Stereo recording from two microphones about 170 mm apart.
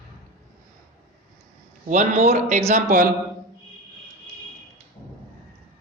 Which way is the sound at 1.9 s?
45° right (ahead or behind).